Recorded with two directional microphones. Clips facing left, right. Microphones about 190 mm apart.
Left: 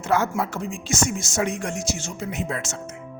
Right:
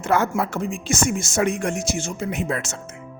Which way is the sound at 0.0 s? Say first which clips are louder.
Right 2 dB; 55° right (ahead or behind).